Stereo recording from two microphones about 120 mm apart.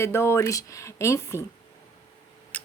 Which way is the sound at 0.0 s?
20° left (ahead or behind).